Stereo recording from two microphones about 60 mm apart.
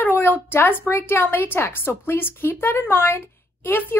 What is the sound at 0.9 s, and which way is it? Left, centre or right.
Speech, left.